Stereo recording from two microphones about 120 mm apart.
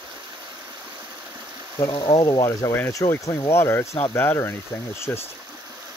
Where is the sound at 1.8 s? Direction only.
45° left (ahead or behind).